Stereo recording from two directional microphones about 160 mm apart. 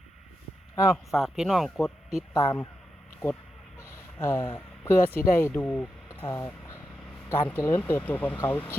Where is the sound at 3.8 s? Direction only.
15° left (ahead or behind).